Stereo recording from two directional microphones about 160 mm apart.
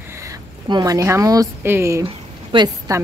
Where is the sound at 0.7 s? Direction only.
25° right (ahead or behind).